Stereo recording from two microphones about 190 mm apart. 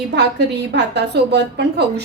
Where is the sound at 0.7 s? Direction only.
65° right (ahead or behind).